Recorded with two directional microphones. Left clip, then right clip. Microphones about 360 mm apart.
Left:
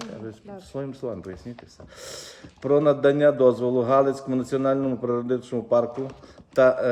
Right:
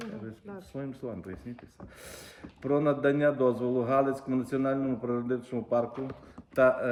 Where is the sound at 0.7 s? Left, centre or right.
Centre.